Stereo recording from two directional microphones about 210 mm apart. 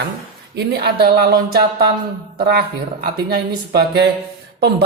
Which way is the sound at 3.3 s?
50° right (ahead or behind).